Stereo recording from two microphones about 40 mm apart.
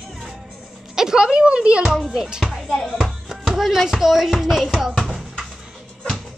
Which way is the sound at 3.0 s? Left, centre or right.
Centre.